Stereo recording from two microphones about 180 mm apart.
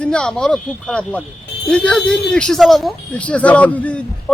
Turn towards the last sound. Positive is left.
turn(degrees=10)  # may be behind; listen again after turning